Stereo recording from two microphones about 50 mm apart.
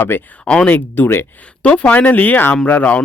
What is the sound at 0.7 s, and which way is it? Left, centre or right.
Speech, left.